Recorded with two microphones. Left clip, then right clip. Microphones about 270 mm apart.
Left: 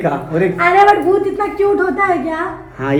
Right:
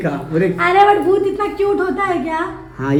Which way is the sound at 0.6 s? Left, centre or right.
Right.